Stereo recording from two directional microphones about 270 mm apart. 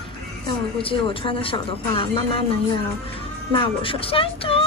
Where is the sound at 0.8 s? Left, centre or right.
Centre.